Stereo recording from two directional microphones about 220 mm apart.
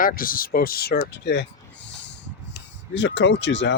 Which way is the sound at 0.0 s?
40° left (ahead or behind).